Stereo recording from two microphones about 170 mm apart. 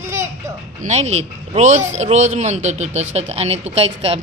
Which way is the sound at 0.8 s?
40° right (ahead or behind).